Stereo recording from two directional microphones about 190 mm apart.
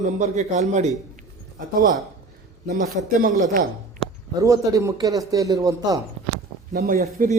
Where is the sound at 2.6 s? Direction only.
45° right (ahead or behind).